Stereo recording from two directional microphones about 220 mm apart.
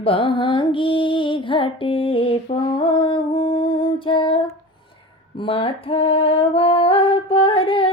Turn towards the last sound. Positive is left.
turn(degrees=25)  # may be behind; listen again after turning